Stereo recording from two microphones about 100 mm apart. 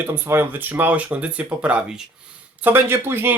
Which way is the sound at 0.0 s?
20° right (ahead or behind).